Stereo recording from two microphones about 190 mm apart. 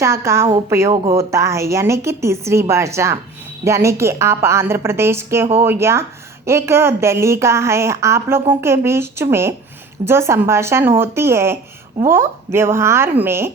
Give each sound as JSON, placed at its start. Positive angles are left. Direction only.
{"t": 0.0, "sound": "a woman's voice", "side_deg": -15}
{"t": 1.0, "sound": "speech", "side_deg": -30}
{"t": 1.3, "sound": "a woman's voice", "side_deg": -15}